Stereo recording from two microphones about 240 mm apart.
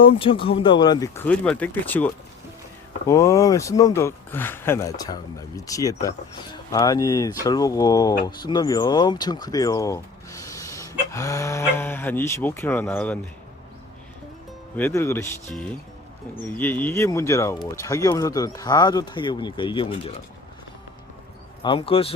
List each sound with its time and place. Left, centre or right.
0.1 s speech: left; by 13.1 s centre
14.8 s speech: centre
21.6 s speech: left